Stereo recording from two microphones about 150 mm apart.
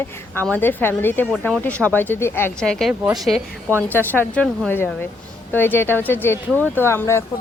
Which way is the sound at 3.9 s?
15° left (ahead or behind).